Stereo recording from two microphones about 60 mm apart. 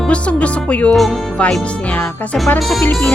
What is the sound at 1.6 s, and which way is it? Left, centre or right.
Speech, left.